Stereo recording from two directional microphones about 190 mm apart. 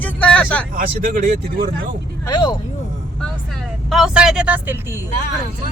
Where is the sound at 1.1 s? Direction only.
45° right (ahead or behind).